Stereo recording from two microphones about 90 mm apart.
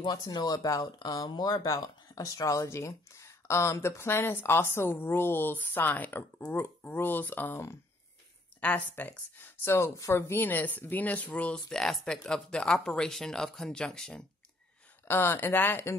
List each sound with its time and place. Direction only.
0.0 s speech: 45° left (ahead or behind); by 9.1 s 20° left (ahead or behind)
9.7 s speech: 30° left (ahead or behind); by 14.2 s 5° left (ahead or behind)
15.0 s speech: 25° left (ahead or behind)